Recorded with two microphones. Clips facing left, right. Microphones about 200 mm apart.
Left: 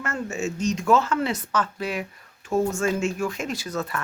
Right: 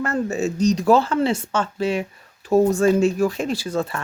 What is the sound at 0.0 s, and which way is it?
Speech, 35° right (ahead or behind).